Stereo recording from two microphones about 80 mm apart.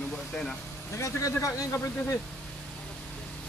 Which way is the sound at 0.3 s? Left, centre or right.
Centre.